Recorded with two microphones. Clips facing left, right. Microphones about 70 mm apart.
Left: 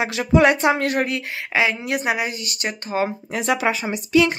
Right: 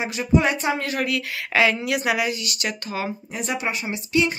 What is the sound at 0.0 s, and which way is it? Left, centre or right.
Speech, left.